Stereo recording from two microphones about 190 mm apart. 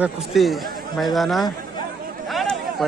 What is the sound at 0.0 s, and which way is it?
A man's voice, centre (ahead or behind).